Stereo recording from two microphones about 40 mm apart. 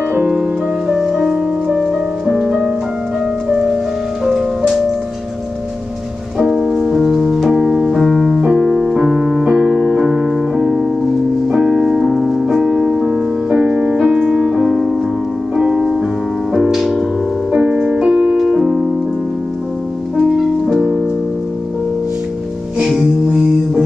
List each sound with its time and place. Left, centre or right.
0.3 s music: centre
6.3 s piano: centre
8.5 s music: centre
9.1 s piano: right
10.5 s music: centre
12.1 s music: centre
14.4 s music: centre
17.5 s music: right
20.2 s music: centre
22.8 s music: centre